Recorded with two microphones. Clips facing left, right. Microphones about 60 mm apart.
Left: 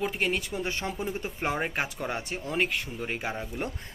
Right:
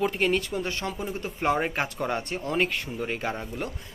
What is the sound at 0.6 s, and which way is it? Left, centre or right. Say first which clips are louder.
Speech: right 1 dB; centre.